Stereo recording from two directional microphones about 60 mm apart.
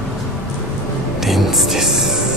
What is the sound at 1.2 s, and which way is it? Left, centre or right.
Music, centre.